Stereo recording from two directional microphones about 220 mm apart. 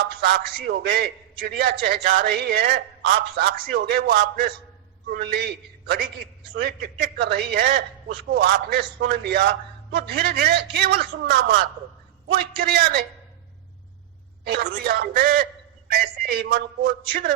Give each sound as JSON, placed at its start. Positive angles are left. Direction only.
{"t": 0.2, "sound": "a man's voice", "side_deg": -45}
{"t": 14.6, "sound": "a man's voice", "side_deg": -45}